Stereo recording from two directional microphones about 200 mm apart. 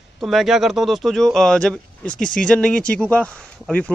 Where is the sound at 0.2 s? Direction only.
Centre (ahead or behind).